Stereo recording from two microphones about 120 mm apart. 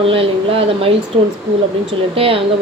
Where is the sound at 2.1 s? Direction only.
50° right (ahead or behind).